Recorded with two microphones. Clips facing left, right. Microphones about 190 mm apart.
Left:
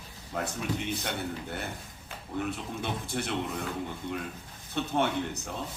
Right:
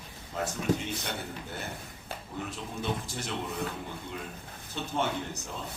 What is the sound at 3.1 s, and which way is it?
Speech, 60° left (ahead or behind).